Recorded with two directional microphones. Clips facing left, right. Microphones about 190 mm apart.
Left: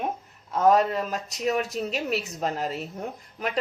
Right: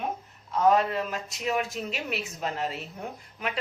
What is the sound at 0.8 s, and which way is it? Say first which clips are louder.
A woman's voice: left 3 dB; 40° left (ahead or behind).